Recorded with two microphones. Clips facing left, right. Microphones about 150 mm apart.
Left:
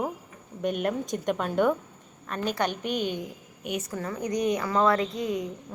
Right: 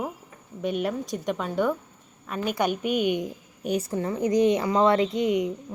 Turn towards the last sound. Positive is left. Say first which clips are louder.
# right 5 dB
turn(degrees=-20)  # may be behind; listen again after turning